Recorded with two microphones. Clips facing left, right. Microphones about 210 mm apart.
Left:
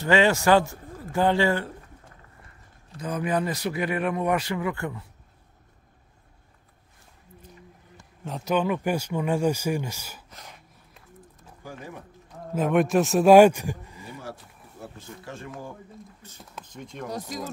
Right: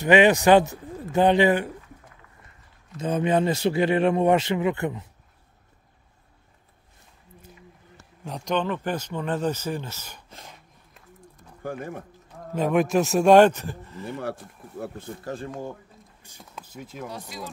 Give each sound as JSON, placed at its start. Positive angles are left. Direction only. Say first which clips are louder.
{"t": 0.0, "sound": "speech", "louder": "right 4 dB", "side_deg": -15}
{"t": 3.0, "sound": "speech", "louder": "right 4 dB", "side_deg": -25}
{"t": 8.2, "sound": "speech", "louder": "left 1 dB", "side_deg": 0}
{"t": 11.6, "sound": "speech", "louder": "right 7 dB", "side_deg": -55}
{"t": 12.5, "sound": "a man's voice", "louder": "even", "side_deg": 0}
{"t": 14.3, "sound": "speech", "louder": "right 8 dB", "side_deg": -50}
{"t": 15.2, "sound": "speech", "louder": "right 6 dB", "side_deg": -35}
{"t": 16.2, "sound": "speech", "louder": "even", "side_deg": -10}
{"t": 17.1, "sound": "speech", "louder": "left 4 dB", "side_deg": 45}